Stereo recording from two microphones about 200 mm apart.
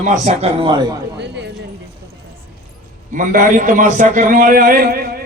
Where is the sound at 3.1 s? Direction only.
40° right (ahead or behind).